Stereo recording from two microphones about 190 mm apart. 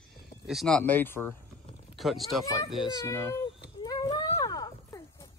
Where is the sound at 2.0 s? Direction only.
Centre (ahead or behind).